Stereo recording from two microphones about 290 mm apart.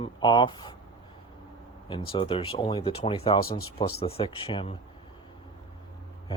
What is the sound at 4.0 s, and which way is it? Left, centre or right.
Speech, centre.